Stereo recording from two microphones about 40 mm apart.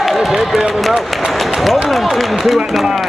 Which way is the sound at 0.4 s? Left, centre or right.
Centre.